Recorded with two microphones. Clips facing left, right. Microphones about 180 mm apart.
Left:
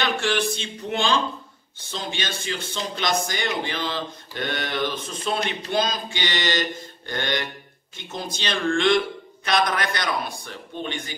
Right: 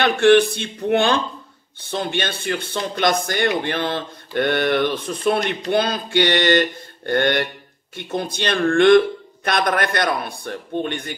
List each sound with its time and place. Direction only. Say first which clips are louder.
0.0 s speech: right 10 dB; 60° right (ahead or behind)